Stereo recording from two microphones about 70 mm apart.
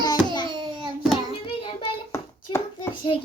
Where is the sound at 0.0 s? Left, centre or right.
Left.